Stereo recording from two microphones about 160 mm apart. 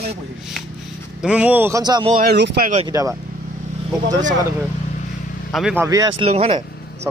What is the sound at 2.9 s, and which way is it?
Speech, 20° right (ahead or behind).